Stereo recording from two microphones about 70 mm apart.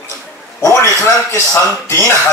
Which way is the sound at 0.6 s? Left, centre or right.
Left.